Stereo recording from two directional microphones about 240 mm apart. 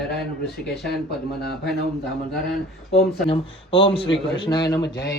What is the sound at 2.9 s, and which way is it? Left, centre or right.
Speech, left.